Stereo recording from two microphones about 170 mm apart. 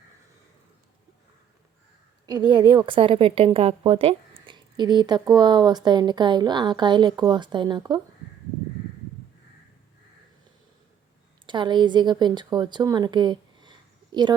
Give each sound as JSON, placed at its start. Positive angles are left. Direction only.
{"t": 2.2, "sound": "a woman's voice", "side_deg": -25}
{"t": 11.4, "sound": "speech", "side_deg": -25}